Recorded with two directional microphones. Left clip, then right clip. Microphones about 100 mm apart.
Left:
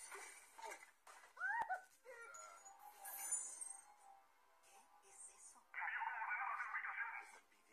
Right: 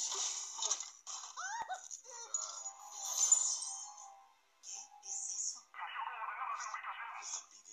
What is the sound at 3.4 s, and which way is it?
Music, 20° left (ahead or behind).